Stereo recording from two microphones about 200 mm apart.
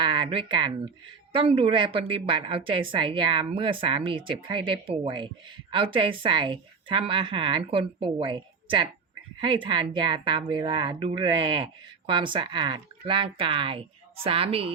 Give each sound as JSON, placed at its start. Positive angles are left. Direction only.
{"t": 0.0, "sound": "a woman's voice", "side_deg": -25}